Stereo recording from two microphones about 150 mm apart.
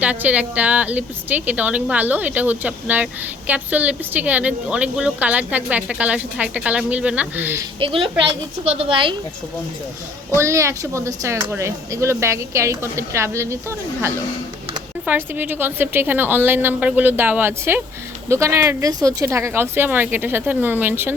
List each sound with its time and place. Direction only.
0.0 s a woman's voice: 10° right (ahead or behind)
7.8 s a child's voice: 35° right (ahead or behind)
10.3 s a woman's voice: 20° right (ahead or behind)